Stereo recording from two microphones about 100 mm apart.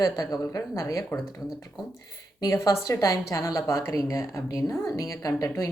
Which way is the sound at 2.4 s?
35° left (ahead or behind).